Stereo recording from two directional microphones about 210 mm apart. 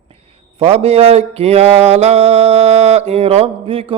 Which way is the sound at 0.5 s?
30° right (ahead or behind).